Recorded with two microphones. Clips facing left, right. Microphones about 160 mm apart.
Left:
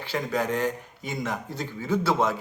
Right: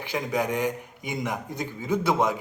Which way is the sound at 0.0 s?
15° right (ahead or behind).